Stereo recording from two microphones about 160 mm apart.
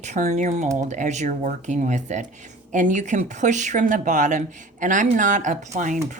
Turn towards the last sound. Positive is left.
turn(degrees=-50)  # may be behind; listen again after turning